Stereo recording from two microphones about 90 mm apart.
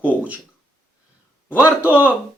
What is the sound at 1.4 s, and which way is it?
Speech, 25° left (ahead or behind).